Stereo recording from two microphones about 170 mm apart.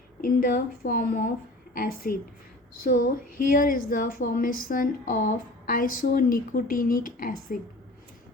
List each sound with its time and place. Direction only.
0.2 s a woman's voice: 55° left (ahead or behind)